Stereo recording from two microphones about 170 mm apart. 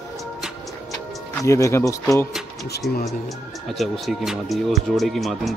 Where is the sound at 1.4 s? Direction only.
15° left (ahead or behind).